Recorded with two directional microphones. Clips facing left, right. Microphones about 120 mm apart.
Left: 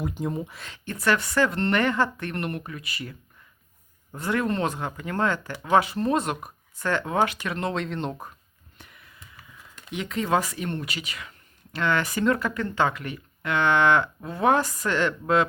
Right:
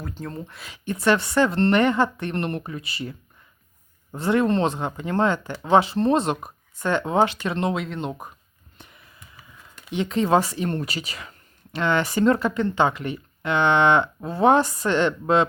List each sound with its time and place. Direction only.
0.0 s speech: 15° left (ahead or behind)
0.5 s speech: 5° right (ahead or behind)
0.9 s speech: 25° right (ahead or behind)
7.7 s speech: 5° right (ahead or behind)
8.8 s a sound: 25° right (ahead or behind)
9.9 s speech: 30° right (ahead or behind)